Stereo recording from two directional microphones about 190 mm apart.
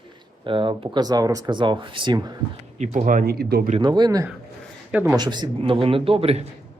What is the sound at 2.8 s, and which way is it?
Speech, 45° right (ahead or behind).